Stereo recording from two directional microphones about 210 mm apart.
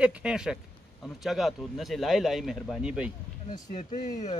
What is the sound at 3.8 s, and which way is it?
Speech, 35° left (ahead or behind).